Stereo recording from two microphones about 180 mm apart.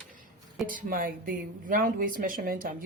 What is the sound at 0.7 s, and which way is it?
Speech, 50° right (ahead or behind).